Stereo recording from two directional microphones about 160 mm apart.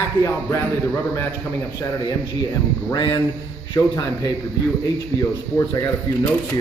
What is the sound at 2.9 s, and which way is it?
A man's voice, 30° left (ahead or behind).